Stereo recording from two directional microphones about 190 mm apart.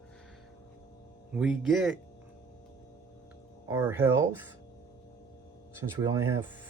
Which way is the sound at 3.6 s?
15° right (ahead or behind).